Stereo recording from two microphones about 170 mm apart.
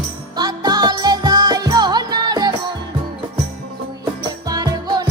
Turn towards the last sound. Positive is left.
turn(degrees=-25)  # may be behind; listen again after turning